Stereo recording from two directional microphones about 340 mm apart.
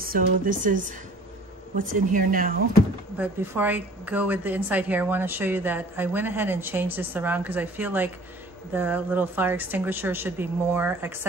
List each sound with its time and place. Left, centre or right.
0.0 s speech: right
3.2 s a woman's voice: centre